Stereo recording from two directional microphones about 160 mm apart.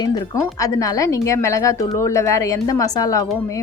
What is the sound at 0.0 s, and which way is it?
Speech, 25° left (ahead or behind).